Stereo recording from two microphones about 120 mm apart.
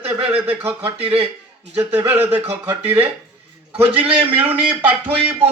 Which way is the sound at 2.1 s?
60° right (ahead or behind).